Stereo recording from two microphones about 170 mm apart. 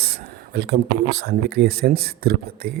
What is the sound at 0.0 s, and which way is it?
Speech, 70° right (ahead or behind).